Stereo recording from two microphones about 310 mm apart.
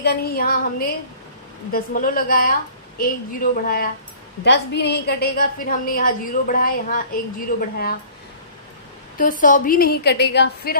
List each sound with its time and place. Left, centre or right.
0.0 s a woman's voice: left
9.1 s a woman's voice: left